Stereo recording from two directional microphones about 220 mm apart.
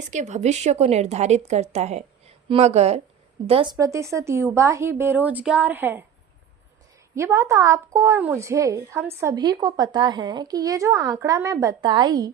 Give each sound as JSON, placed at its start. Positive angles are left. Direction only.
{"t": 0.1, "sound": "a woman's voice", "side_deg": -35}
{"t": 7.2, "sound": "speech", "side_deg": -15}